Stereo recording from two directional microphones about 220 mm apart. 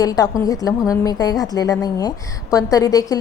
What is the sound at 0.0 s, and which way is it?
A woman's voice, 15° left (ahead or behind).